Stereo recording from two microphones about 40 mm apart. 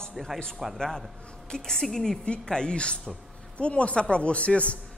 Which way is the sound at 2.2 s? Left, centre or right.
Left.